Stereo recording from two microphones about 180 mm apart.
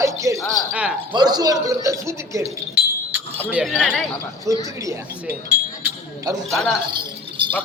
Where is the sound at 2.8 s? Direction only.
5° right (ahead or behind).